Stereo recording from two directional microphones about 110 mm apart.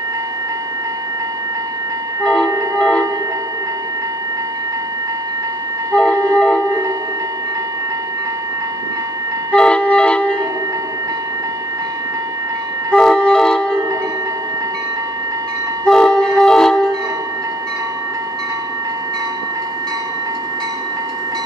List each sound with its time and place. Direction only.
2.2 s music: 10° left (ahead or behind)
5.9 s vehicle: 10° left (ahead or behind)
9.5 s music: 10° left (ahead or behind)
12.9 s music: 5° left (ahead or behind)
15.8 s vehicle: 10° left (ahead or behind)